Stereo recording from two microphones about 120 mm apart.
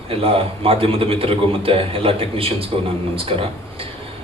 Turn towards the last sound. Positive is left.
turn(degrees=-50)  # may be behind; listen again after turning